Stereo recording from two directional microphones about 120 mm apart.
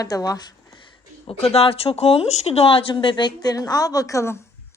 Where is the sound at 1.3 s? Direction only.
55° left (ahead or behind); by 4.4 s 25° left (ahead or behind).